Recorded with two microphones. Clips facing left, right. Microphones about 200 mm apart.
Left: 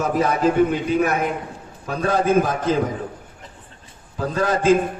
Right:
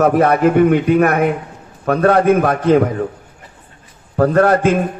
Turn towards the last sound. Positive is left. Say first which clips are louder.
# right 5 dB
turn(degrees=-60)  # may be behind; listen again after turning